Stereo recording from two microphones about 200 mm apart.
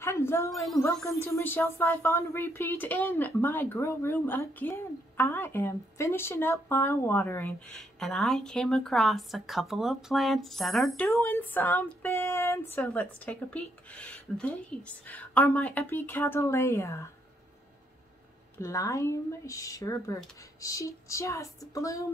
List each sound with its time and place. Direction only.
0.0 s a sound: 15° left (ahead or behind)
0.7 s a woman's voice: 15° left (ahead or behind)
11.1 s a woman's voice: 15° left (ahead or behind)
18.6 s a woman's voice: 15° left (ahead or behind)